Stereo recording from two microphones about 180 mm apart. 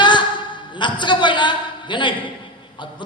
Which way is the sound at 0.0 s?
25° left (ahead or behind).